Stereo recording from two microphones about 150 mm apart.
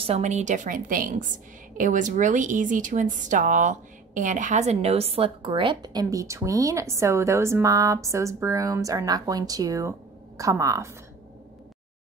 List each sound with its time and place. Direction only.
0.0 s a woman's voice: 45° right (ahead or behind); by 10.9 s 20° right (ahead or behind)